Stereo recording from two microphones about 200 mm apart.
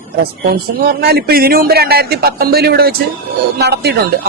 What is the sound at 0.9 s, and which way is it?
A man's voice, 50° right (ahead or behind).